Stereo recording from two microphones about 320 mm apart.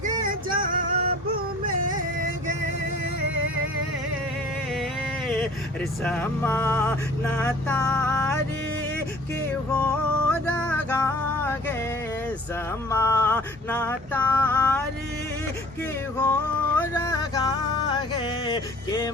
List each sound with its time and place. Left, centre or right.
0.3 s music: right
6.0 s vehicle: centre
9.8 s music: centre
12.9 s a sound: centre
16.2 s music: centre